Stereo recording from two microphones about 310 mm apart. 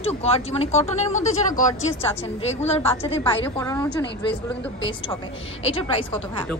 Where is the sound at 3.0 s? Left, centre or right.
Centre.